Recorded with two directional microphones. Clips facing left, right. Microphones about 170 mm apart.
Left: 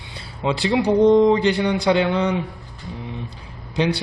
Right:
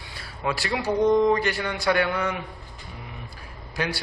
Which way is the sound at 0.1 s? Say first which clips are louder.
Left 5 dB; 20° left (ahead or behind).